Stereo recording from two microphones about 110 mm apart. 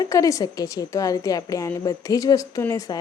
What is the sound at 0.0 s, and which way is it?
A woman's voice, 30° left (ahead or behind).